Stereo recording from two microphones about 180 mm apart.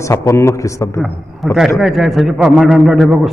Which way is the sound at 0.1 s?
15° left (ahead or behind).